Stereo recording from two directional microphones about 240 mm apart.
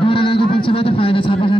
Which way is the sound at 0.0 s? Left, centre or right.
Left.